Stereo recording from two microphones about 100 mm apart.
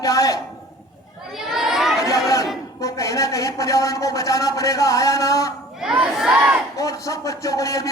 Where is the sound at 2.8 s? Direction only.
35° left (ahead or behind).